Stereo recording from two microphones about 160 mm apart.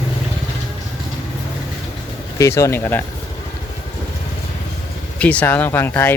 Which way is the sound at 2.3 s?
20° left (ahead or behind).